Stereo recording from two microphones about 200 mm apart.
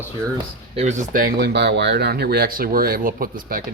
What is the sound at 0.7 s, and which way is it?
Speech, 35° right (ahead or behind).